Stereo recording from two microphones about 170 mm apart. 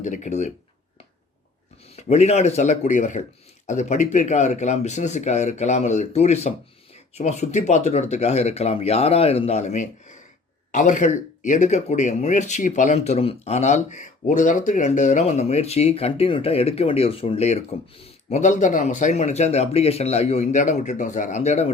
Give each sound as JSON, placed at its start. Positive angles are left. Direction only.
{"t": 0.0, "sound": "speech", "side_deg": 45}
{"t": 2.0, "sound": "speech", "side_deg": 40}